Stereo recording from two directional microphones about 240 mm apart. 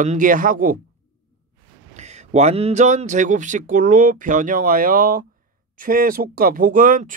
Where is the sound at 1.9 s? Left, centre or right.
Right.